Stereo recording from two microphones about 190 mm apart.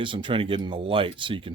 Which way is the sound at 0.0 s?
25° right (ahead or behind).